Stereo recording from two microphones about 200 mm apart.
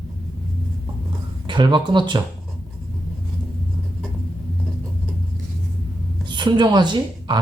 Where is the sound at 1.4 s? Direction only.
25° right (ahead or behind).